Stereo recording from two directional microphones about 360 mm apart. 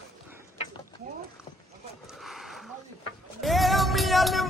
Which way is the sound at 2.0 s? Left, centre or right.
Centre.